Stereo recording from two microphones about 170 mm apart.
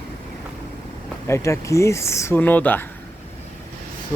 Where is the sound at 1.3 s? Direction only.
15° left (ahead or behind).